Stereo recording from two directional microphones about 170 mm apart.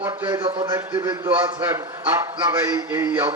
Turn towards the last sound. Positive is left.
turn(degrees=-15)  # may be behind; listen again after turning